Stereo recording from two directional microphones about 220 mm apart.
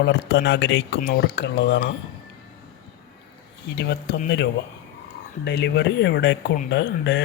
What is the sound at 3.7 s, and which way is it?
Speech, 50° left (ahead or behind).